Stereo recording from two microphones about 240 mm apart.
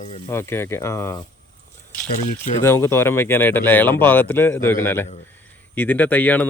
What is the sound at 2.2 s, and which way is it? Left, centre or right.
Speech, left.